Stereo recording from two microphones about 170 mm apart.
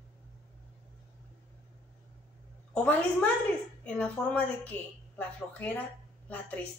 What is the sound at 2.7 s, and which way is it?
A woman's voice, 5° left (ahead or behind).